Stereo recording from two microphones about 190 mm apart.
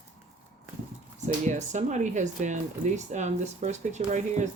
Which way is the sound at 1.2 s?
40° right (ahead or behind).